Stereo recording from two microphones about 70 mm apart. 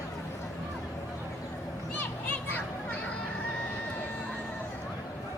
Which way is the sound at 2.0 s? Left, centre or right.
Left.